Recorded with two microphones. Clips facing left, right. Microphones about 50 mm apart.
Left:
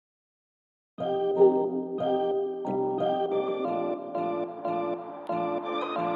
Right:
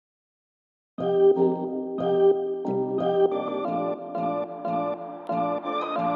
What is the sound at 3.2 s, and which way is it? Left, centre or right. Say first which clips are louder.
Music: right 4 dB; right.